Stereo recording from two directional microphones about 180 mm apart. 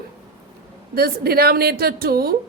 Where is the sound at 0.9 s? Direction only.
60° right (ahead or behind).